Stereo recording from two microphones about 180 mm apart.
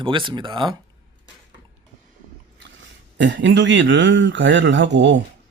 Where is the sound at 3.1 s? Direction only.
80° right.